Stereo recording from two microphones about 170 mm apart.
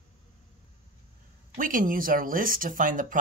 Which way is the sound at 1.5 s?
55° right (ahead or behind).